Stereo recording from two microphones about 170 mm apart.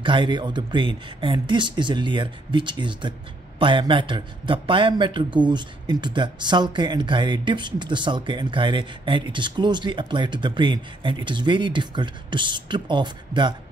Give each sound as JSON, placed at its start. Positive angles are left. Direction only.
{"t": 0.0, "sound": "speech", "side_deg": -30}